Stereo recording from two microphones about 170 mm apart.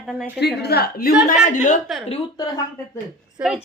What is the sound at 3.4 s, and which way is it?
Speech, 10° right (ahead or behind).